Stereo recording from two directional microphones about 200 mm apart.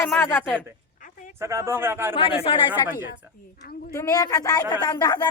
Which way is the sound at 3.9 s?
15° left (ahead or behind).